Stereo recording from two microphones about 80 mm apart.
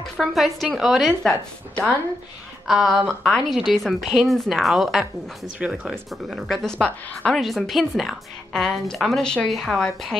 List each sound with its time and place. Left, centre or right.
0.0 s a woman's voice: centre
2.6 s a woman's voice: centre
3.1 s a woman's voice: centre
7.3 s a woman's voice: centre
9.5 s a woman's voice: centre